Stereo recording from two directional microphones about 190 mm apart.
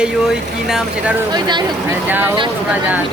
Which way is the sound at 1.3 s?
25° right (ahead or behind).